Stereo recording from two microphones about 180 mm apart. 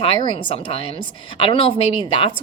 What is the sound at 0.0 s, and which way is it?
A woman's voice, 30° left (ahead or behind).